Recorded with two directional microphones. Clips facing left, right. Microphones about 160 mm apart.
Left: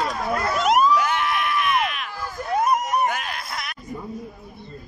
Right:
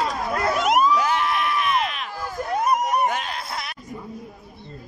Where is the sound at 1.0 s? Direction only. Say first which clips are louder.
Right 1 dB; 35° right (ahead or behind).